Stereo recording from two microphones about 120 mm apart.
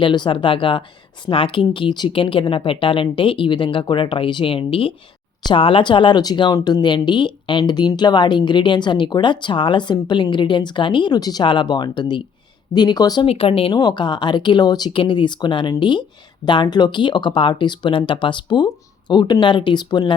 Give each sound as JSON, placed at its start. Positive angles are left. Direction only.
{"t": 0.0, "sound": "speech", "side_deg": 40}
{"t": 13.2, "sound": "speech", "side_deg": 55}
{"t": 13.7, "sound": "speech", "side_deg": 35}